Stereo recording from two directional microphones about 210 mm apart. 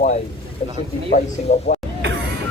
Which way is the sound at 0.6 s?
30° left (ahead or behind).